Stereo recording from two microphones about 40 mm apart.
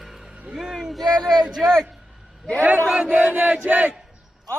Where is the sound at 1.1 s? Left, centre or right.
Centre.